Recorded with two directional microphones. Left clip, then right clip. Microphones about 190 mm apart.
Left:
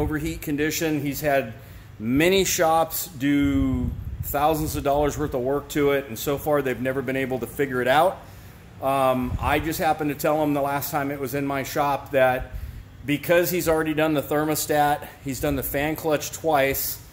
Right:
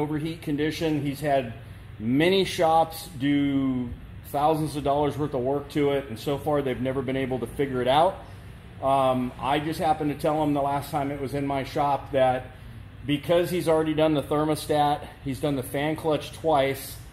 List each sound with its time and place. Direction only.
0.0 s speech: 15° left (ahead or behind)